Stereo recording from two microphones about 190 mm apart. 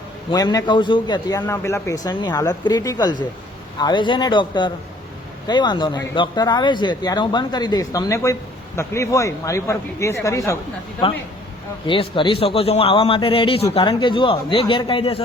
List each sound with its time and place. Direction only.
0.3 s speech: 20° left (ahead or behind)
11.9 s speech: 25° left (ahead or behind)